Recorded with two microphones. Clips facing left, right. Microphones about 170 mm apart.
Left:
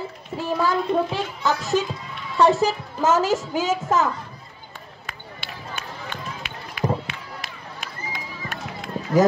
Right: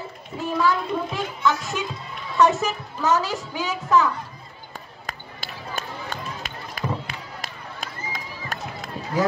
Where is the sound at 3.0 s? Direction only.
45° left (ahead or behind).